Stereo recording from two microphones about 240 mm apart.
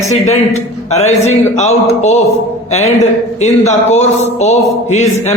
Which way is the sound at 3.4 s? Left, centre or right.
Left.